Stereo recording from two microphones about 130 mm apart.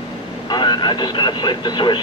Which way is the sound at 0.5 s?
35° left (ahead or behind).